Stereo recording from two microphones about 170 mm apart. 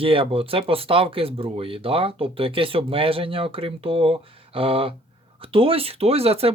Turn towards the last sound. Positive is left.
turn(degrees=-35)  # may be behind; listen again after turning